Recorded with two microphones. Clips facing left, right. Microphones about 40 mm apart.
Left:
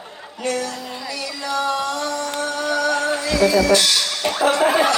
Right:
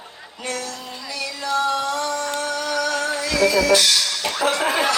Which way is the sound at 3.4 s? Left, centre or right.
Left.